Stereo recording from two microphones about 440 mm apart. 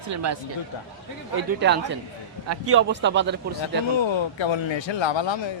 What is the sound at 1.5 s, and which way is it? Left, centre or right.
Speech, right.